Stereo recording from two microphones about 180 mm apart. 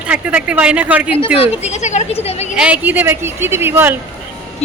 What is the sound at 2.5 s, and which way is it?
A man's voice, 5° right (ahead or behind).